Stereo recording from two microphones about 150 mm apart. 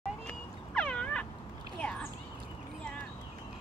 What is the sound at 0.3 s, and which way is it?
Cat, 5° left (ahead or behind).